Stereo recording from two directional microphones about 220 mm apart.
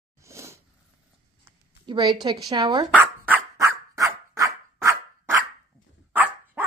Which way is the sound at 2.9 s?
10° right (ahead or behind).